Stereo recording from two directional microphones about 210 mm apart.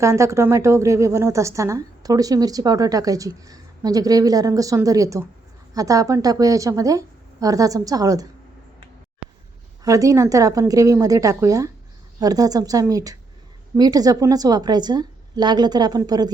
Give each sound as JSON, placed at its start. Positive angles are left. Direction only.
{"t": 0.0, "sound": "a woman's voice", "side_deg": -15}
{"t": 9.8, "sound": "a woman's voice", "side_deg": -15}